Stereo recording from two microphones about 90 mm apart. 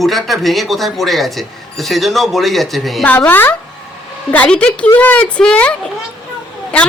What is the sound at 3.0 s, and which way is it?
A woman's voice, 15° left (ahead or behind).